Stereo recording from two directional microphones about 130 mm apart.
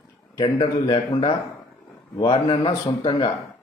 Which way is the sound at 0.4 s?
40° left (ahead or behind).